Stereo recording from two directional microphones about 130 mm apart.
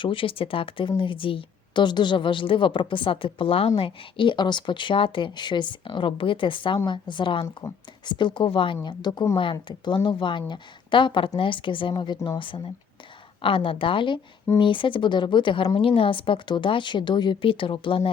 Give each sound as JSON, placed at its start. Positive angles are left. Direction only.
{"t": 0.0, "sound": "a woman's voice", "side_deg": 40}
{"t": 7.6, "sound": "speech", "side_deg": 20}
{"t": 8.0, "sound": "a woman's voice", "side_deg": 35}